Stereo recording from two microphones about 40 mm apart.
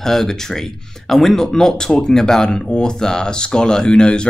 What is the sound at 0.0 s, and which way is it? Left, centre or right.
Speech, centre.